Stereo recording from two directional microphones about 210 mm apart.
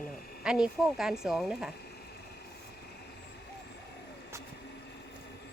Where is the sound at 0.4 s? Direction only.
5° right (ahead or behind).